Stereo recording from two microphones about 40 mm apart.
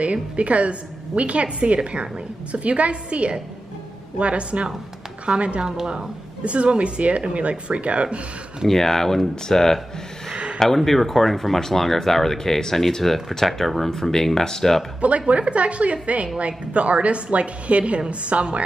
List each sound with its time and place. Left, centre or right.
0.0 s a woman's voice: right
8.6 s speech: centre
15.0 s speech: right